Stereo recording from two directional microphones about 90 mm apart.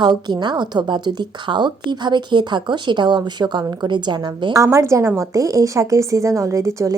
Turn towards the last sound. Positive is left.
turn(degrees=-35)  # may be behind; listen again after turning